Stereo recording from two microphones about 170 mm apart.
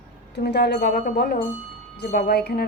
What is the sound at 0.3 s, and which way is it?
A woman's voice, 75° left (ahead or behind).